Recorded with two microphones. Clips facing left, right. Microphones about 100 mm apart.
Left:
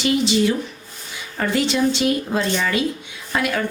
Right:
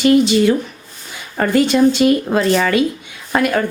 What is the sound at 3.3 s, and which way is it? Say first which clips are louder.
Speech: right 6 dB; 45° right (ahead or behind).